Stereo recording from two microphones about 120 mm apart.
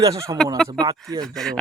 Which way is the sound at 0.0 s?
30° right (ahead or behind).